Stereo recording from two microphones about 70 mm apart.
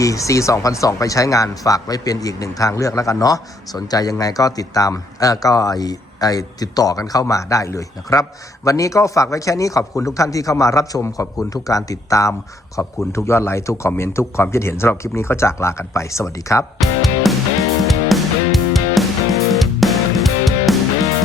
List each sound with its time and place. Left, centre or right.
0.0 s speech: left
16.8 s music: centre